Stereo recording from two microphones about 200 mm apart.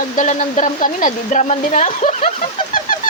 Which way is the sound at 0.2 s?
40° left (ahead or behind).